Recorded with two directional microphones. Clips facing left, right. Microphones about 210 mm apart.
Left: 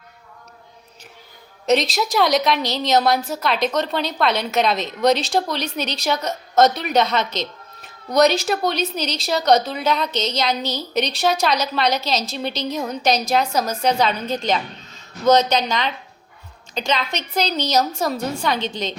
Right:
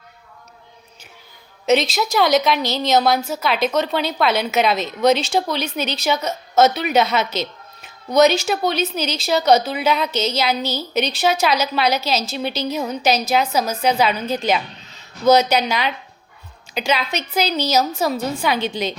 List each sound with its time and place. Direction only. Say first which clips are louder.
1.6 s a woman's voice: right 1 dB; centre (ahead or behind)